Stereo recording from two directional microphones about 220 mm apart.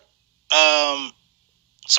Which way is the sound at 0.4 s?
50° right (ahead or behind).